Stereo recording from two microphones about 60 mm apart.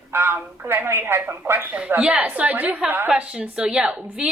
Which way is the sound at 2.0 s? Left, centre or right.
Right.